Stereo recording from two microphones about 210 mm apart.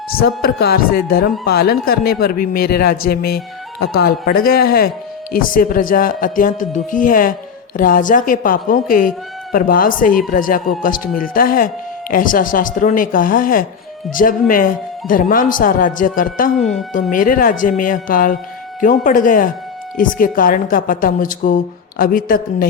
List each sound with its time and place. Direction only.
0.2 s a man's voice: 45° left (ahead or behind)